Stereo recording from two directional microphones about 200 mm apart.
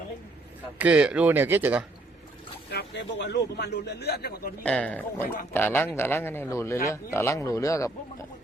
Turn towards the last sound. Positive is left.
turn(degrees=15)  # may be behind; listen again after turning